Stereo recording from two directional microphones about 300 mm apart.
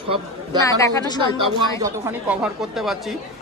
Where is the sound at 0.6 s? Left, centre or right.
Centre.